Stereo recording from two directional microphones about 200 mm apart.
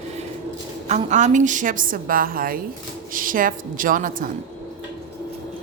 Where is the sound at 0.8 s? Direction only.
35° right (ahead or behind).